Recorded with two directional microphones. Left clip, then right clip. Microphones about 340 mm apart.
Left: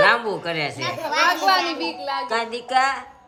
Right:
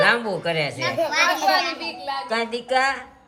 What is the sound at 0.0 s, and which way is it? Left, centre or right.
Speech, centre.